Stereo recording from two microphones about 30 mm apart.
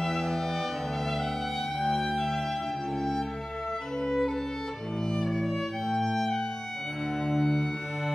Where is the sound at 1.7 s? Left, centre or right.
Centre.